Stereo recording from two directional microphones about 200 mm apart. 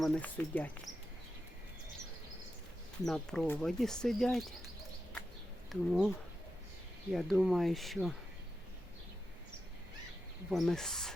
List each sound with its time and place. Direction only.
0.0 s speech: 10° left (ahead or behind)
3.0 s speech: centre (ahead or behind)
5.6 s speech: centre (ahead or behind)
7.1 s speech: centre (ahead or behind)
10.5 s speech: centre (ahead or behind)